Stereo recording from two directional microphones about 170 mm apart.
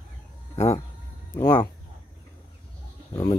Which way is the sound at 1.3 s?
20° left (ahead or behind).